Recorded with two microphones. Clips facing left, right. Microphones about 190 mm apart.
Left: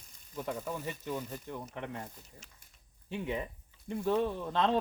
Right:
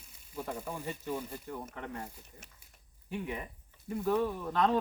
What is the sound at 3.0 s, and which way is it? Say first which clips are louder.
Speech: left 2 dB; 25° left (ahead or behind).